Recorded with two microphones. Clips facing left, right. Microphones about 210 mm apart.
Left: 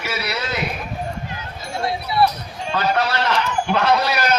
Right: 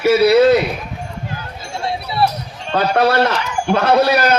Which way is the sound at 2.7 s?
55° right (ahead or behind).